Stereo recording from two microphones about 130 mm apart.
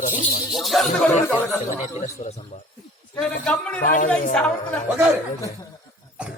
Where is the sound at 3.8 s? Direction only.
90° left.